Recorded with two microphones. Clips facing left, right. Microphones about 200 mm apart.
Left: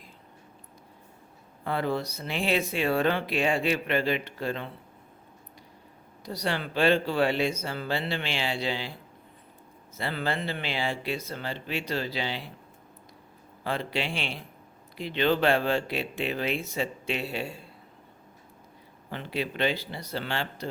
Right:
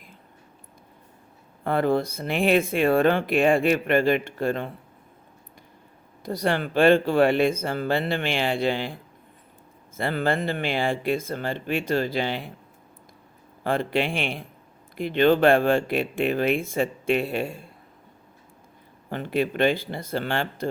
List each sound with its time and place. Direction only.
1.6 s speech: 55° right (ahead or behind)
6.2 s speech: 50° right (ahead or behind)
10.0 s speech: 50° right (ahead or behind)
13.7 s speech: 50° right (ahead or behind)
19.1 s speech: 50° right (ahead or behind)